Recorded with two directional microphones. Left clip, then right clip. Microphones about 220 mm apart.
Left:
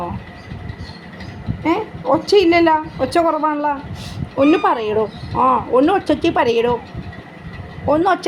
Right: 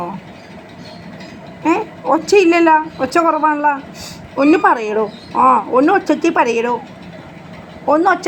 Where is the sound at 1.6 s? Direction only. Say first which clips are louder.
Right 2 dB; centre (ahead or behind); by 4.6 s 20° left (ahead or behind).